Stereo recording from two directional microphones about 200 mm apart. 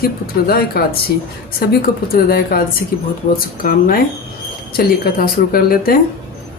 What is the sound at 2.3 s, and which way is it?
Speech, 45° left (ahead or behind).